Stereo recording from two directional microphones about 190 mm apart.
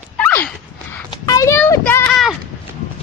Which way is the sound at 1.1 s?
20° left (ahead or behind).